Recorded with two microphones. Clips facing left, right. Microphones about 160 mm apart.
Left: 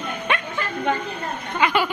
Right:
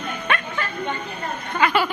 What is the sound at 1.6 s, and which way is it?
Speech, 15° left (ahead or behind).